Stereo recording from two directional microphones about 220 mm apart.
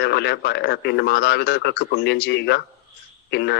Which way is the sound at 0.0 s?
50° left (ahead or behind).